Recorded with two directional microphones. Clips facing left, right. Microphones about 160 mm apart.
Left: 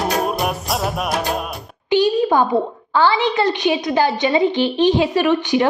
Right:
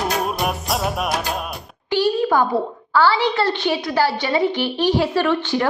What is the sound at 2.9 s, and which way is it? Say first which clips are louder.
A woman's voice: left 1 dB; 20° left (ahead or behind).